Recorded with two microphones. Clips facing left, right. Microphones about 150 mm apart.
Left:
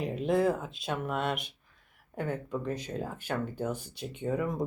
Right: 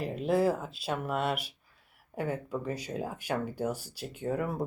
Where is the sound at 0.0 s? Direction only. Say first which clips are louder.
Even; centre (ahead or behind).